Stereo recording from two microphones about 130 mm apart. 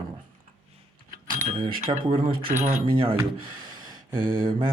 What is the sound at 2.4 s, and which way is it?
Speech, 65° right (ahead or behind).